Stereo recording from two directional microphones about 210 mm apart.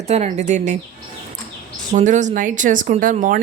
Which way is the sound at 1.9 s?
35° right (ahead or behind).